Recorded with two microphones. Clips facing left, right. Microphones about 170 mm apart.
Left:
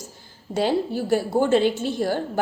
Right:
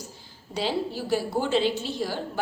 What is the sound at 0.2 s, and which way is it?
A woman's voice, 50° left (ahead or behind).